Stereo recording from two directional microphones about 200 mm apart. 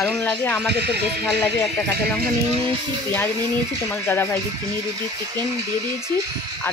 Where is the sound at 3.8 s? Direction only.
10° left (ahead or behind).